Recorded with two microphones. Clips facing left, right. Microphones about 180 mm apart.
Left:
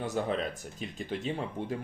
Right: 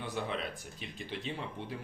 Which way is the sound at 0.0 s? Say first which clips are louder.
Left 6 dB; 45° left (ahead or behind).